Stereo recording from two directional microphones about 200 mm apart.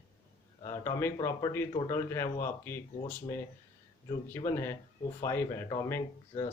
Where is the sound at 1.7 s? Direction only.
25° left (ahead or behind).